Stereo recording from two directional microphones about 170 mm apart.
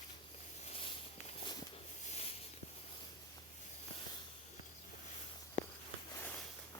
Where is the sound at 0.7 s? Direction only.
35° left (ahead or behind).